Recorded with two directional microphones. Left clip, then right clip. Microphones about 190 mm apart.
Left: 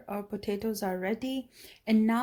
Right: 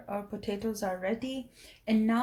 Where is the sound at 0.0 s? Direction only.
50° left (ahead or behind).